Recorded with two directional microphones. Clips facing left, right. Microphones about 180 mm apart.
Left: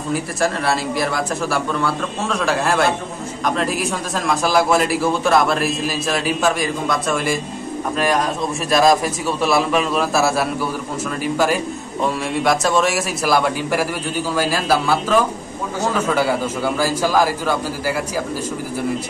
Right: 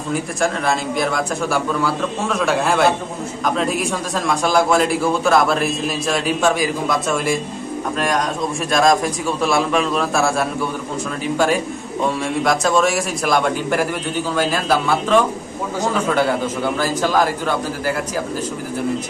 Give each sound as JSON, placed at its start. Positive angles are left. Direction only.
{"t": 0.1, "sound": "a man's voice", "side_deg": 5}